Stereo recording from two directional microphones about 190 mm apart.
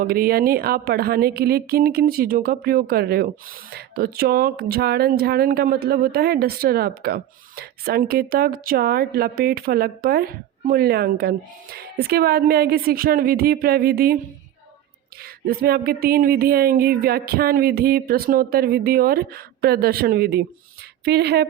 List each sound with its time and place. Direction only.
0.0 s speech: 50° right (ahead or behind)
15.4 s speech: 55° right (ahead or behind)